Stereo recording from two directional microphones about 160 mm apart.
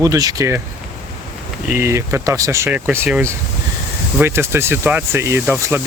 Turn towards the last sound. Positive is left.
turn(degrees=-15)  # may be behind; listen again after turning